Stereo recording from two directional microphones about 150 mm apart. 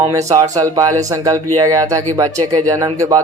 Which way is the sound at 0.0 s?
20° right (ahead or behind).